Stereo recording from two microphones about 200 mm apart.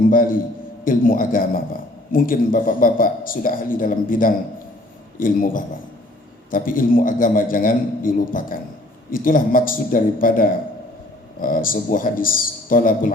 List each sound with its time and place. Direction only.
0.0 s a man's voice: 45° left (ahead or behind)